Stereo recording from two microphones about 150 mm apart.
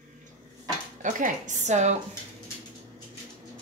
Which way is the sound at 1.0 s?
60° right (ahead or behind).